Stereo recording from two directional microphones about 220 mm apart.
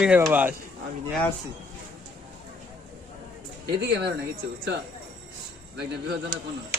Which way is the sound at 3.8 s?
50° right (ahead or behind).